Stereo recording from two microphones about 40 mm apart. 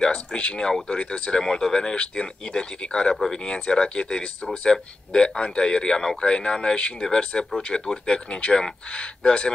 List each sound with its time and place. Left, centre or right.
0.0 s speech: left